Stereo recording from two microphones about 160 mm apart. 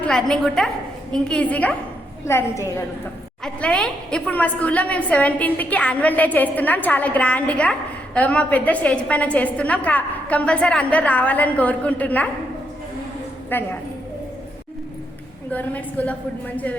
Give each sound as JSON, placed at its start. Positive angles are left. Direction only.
{"t": 0.0, "sound": "a woman's voice", "side_deg": 5}
{"t": 3.4, "sound": "a woman's voice", "side_deg": 5}
{"t": 13.5, "sound": "a woman's voice", "side_deg": 15}
{"t": 15.5, "sound": "a woman's voice", "side_deg": 10}